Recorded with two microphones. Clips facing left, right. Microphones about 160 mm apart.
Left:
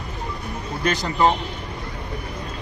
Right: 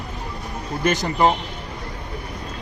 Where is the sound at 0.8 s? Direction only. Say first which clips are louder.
Right 2 dB; 20° right (ahead or behind).